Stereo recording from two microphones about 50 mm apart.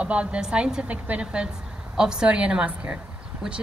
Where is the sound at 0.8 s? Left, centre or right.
Right.